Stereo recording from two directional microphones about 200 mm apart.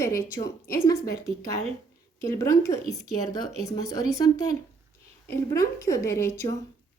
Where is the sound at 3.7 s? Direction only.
20° left (ahead or behind).